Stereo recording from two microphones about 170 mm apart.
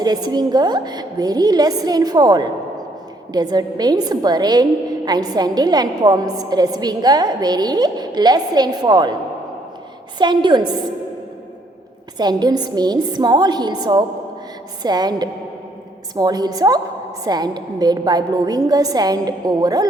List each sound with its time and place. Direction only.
0.0 s a woman's voice: 25° right (ahead or behind)
10.2 s a woman's voice: 25° right (ahead or behind)
12.1 s a woman's voice: 25° right (ahead or behind)